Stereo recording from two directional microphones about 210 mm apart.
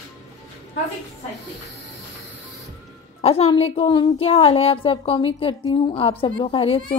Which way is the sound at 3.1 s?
30° left (ahead or behind).